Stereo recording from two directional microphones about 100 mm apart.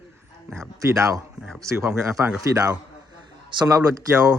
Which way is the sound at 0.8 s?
30° right (ahead or behind).